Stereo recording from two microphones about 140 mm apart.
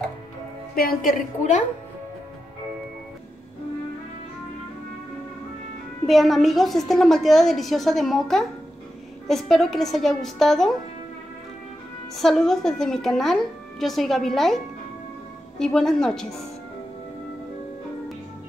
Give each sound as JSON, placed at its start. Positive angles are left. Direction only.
{"t": 0.7, "sound": "a woman's voice", "side_deg": 90}
{"t": 6.0, "sound": "a woman's voice", "side_deg": 0}
{"t": 12.2, "sound": "a woman's voice", "side_deg": 0}
{"t": 15.6, "sound": "a woman's voice", "side_deg": 5}